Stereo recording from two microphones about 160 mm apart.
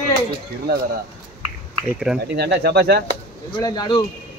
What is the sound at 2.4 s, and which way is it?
Speech, 90° right.